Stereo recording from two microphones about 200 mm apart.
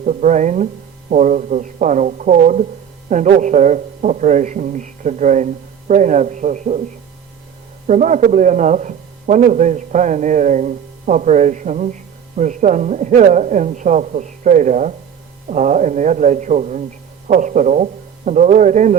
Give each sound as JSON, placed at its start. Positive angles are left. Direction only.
{"t": 0.0, "sound": "speech", "side_deg": -40}
{"t": 7.9, "sound": "speech", "side_deg": -40}